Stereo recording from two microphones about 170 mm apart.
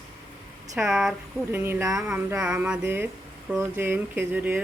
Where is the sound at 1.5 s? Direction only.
15° right (ahead or behind).